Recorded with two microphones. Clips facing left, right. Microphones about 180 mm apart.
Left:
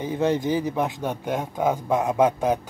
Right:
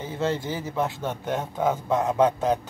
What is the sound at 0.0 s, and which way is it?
Speech, 15° left (ahead or behind).